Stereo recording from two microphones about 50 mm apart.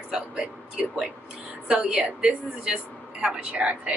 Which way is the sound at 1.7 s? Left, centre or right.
Centre.